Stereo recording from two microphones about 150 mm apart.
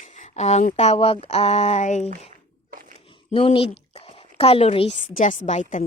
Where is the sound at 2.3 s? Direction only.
60° right (ahead or behind).